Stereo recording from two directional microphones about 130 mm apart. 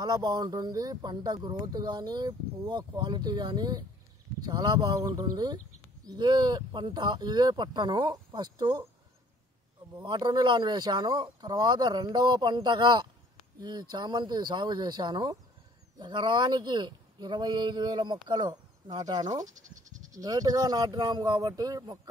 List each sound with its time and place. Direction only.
0.0 s speech: 30° right (ahead or behind)
9.9 s speech: 35° right (ahead or behind)
19.4 s bleat: 75° right (ahead or behind)
20.2 s speech: 30° right (ahead or behind)